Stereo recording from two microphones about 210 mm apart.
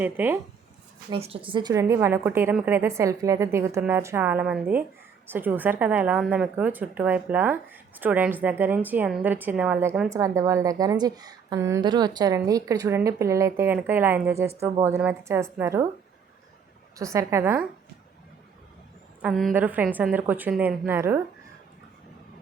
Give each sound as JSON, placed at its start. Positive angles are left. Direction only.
{"t": 0.0, "sound": "a woman's voice", "side_deg": -10}
{"t": 1.1, "sound": "a woman's voice", "side_deg": -25}
{"t": 17.0, "sound": "a woman's voice", "side_deg": -15}
{"t": 19.2, "sound": "a woman's voice", "side_deg": 0}